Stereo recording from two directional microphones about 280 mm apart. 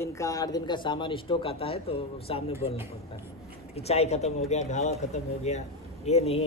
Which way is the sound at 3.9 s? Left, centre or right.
Left.